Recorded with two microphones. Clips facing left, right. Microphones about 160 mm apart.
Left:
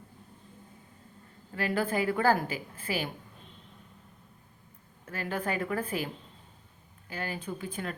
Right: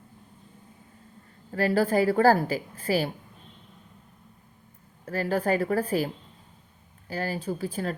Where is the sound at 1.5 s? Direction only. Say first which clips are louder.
Right 7 dB; 35° right (ahead or behind).